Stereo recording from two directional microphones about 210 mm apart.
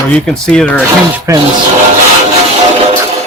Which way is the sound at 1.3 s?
15° right (ahead or behind).